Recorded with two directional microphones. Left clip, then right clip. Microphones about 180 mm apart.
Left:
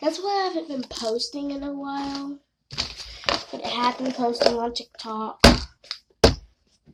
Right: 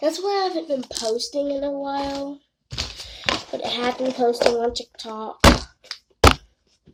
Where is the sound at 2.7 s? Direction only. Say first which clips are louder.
Even; 5° right (ahead or behind).